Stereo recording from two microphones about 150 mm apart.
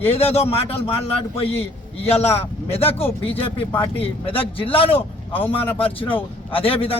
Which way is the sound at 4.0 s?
40° left (ahead or behind).